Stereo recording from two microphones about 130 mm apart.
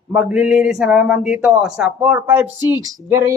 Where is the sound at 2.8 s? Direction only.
25° right (ahead or behind).